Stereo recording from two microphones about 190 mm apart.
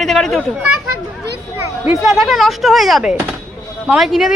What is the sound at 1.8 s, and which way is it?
Speech, centre (ahead or behind).